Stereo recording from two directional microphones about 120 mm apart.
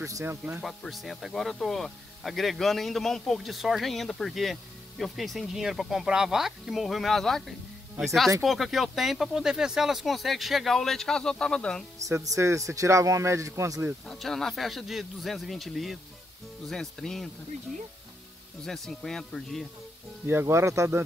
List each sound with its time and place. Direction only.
0.0 s speech: 25° right (ahead or behind)
0.6 s speech: centre (ahead or behind)
12.0 s speech: 30° right (ahead or behind)
14.0 s speech: centre (ahead or behind)
18.6 s speech: 5° left (ahead or behind)
20.2 s speech: 20° right (ahead or behind)